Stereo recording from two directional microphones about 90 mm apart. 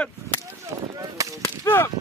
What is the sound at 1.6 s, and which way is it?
Speech, 25° left (ahead or behind).